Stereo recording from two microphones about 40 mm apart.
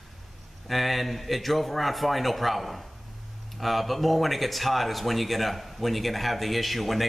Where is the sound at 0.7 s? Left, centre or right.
Centre.